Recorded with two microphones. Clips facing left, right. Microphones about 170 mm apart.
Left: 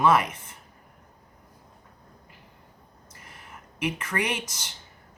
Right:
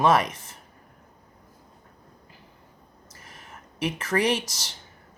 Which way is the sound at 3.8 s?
35° right (ahead or behind).